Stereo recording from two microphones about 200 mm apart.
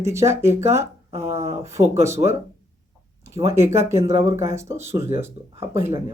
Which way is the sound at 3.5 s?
15° right (ahead or behind).